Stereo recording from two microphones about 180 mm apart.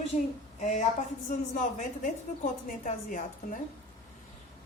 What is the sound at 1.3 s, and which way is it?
A woman's voice, 45° left (ahead or behind).